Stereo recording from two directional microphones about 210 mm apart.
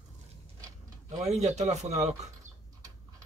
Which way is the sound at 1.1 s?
30° right (ahead or behind).